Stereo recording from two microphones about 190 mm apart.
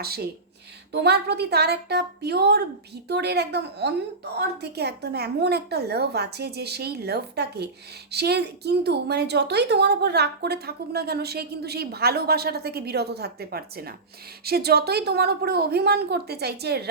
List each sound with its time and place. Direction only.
0.0 s a woman's voice: 55° right (ahead or behind)